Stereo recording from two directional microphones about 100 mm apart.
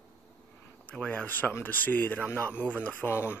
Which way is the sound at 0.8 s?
15° left (ahead or behind).